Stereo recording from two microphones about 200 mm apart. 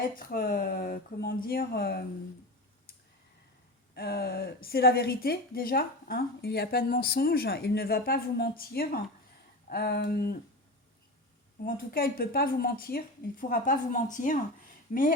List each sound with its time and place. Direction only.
0.2 s a woman's voice: 45° left (ahead or behind)
3.9 s a woman's voice: 50° left (ahead or behind)
11.6 s a woman's voice: 50° left (ahead or behind)